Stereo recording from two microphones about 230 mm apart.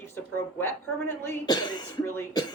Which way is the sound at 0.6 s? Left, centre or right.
Centre.